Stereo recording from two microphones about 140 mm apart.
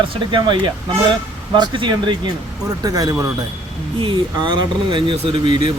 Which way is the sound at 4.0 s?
35° right (ahead or behind).